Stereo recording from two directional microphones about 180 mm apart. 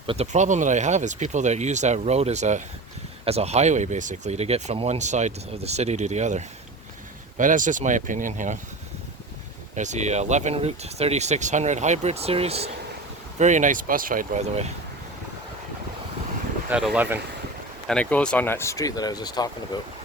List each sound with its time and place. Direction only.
0.1 s speech: 40° right (ahead or behind)
9.7 s speech: 40° right (ahead or behind)
16.6 s speech: 5° right (ahead or behind)
17.8 s speech: 5° left (ahead or behind); by 19.5 s 20° left (ahead or behind)